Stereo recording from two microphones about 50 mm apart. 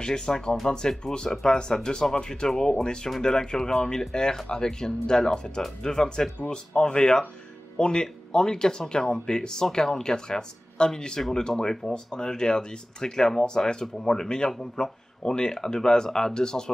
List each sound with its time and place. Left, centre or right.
0.0 s speech: centre